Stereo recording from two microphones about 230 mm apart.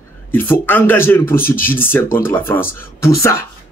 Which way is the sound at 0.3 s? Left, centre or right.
Centre.